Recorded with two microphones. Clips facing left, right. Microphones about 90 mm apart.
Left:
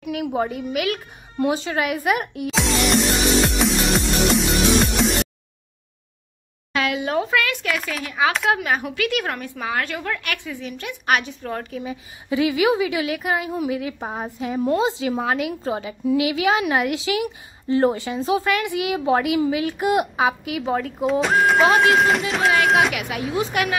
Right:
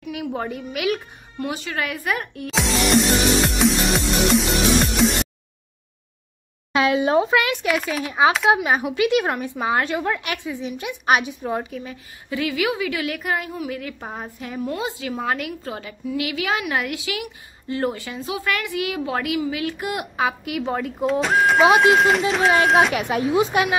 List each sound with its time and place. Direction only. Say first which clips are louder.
0.1 s speech: left 4 dB; 5° left (ahead or behind)
1.4 s a woman's voice: left 5 dB; 25° left (ahead or behind)
2.5 s music: right 1 dB; centre (ahead or behind)
6.7 s speech: right 4 dB; 25° right (ahead or behind)
7.8 s speech: right 3 dB; 5° right (ahead or behind)
8.5 s a woman's voice: right 3 dB; 20° right (ahead or behind)
11.8 s a woman's voice: left 5 dB; 15° left (ahead or behind)
14.6 s a woman's voice: left 6 dB; 30° left (ahead or behind)
18.5 s a woman's voice: left 3 dB; 20° left (ahead or behind)
20.4 s speech: left 1 dB; centre (ahead or behind)
22.9 s speech: right 5 dB; 35° right (ahead or behind)
23.3 s a woman's voice: right 2 dB; 25° right (ahead or behind)